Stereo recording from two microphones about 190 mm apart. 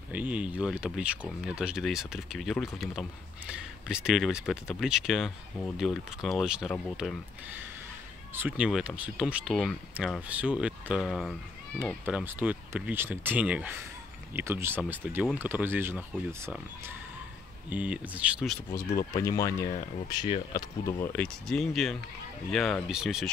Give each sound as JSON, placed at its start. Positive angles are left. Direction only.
{"t": 0.1, "sound": "speech", "side_deg": -5}
{"t": 8.4, "sound": "speech", "side_deg": -5}
{"t": 17.6, "sound": "speech", "side_deg": -5}
{"t": 18.7, "sound": "speech", "side_deg": 15}